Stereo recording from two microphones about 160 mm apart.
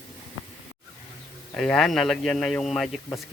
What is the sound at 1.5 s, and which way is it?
Speech, 5° left (ahead or behind).